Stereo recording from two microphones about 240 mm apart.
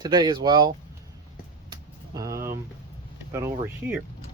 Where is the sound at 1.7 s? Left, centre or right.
Centre.